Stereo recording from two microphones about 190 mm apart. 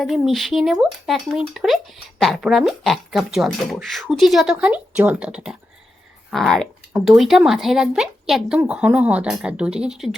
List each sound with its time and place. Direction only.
0.0 s speech: centre (ahead or behind)